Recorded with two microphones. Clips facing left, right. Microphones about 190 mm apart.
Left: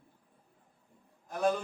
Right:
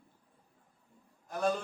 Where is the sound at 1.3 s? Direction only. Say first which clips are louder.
Left 2 dB; centre (ahead or behind).